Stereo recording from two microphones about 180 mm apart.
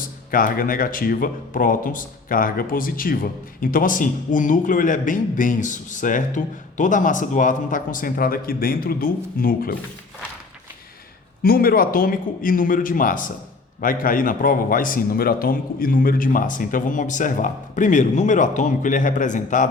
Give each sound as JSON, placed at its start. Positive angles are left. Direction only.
{"t": 0.3, "sound": "speech", "side_deg": 50}
{"t": 11.4, "sound": "speech", "side_deg": 55}